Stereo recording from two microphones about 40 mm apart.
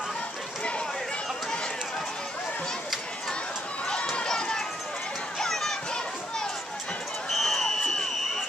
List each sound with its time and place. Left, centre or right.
3.8 s run: left
5.4 s children playing: centre
7.2 s a sound: centre